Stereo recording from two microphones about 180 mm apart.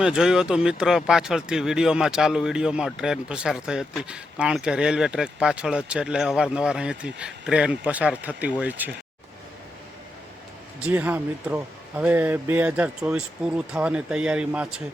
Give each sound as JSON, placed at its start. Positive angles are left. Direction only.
{"t": 0.0, "sound": "speech", "side_deg": -5}
{"t": 10.8, "sound": "speech", "side_deg": -10}